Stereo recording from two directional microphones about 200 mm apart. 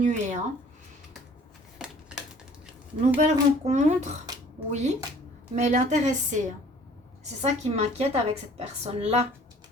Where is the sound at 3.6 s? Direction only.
35° right (ahead or behind).